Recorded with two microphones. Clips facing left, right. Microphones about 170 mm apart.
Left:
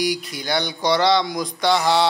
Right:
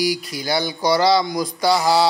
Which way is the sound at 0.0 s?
Centre (ahead or behind).